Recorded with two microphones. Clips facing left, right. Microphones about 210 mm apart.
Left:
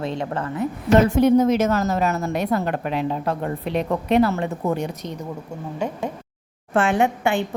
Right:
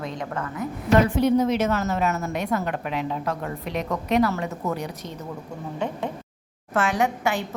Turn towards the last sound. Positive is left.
turn(degrees=30)  # may be behind; listen again after turning